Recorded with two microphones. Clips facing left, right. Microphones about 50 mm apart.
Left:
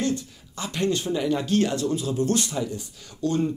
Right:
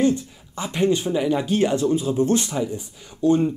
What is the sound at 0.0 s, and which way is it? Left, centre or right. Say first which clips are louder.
Speech: right 6 dB; right.